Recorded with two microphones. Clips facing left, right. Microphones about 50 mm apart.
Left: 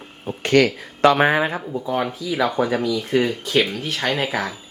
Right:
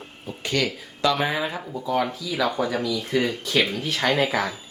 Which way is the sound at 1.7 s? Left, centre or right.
Left.